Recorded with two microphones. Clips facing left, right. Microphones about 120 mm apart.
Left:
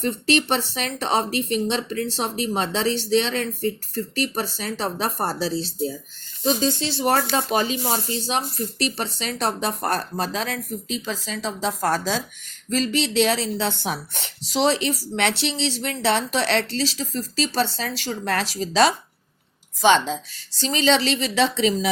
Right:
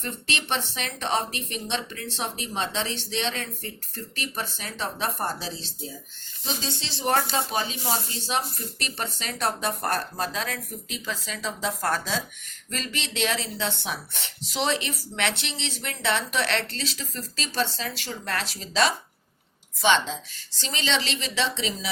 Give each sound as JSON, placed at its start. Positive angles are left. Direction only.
{"t": 0.0, "sound": "a woman's voice", "side_deg": 35}
{"t": 9.0, "sound": "a woman's voice", "side_deg": 30}